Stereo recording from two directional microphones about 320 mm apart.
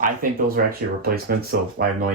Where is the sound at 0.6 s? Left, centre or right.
Right.